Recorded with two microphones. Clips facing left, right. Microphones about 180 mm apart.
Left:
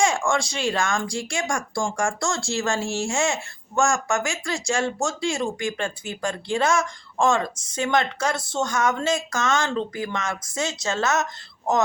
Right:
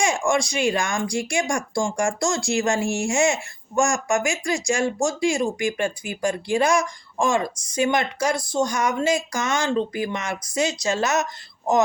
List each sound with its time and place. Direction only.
0.0 s speech: 15° right (ahead or behind)